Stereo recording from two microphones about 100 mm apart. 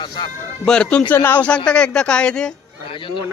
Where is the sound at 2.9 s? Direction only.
60° left (ahead or behind).